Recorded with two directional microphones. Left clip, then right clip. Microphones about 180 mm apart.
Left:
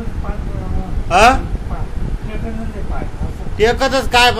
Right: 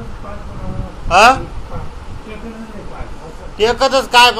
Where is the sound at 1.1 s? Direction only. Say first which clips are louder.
Right 2 dB; 30° left (ahead or behind).